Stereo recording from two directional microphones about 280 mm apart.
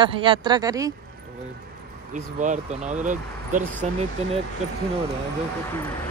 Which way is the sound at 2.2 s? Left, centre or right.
Right.